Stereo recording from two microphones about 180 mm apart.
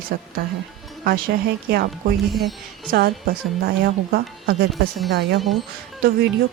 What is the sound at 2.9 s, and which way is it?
Speech, 55° right (ahead or behind).